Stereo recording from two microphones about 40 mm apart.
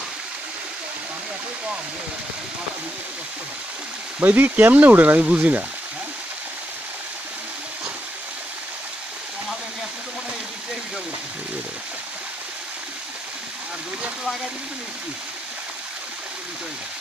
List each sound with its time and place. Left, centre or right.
4.2 s speech: right